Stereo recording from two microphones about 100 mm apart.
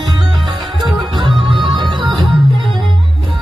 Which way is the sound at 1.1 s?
50° right (ahead or behind).